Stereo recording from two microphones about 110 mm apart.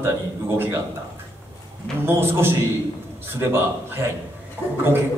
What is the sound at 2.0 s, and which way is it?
A man's voice, 20° right (ahead or behind).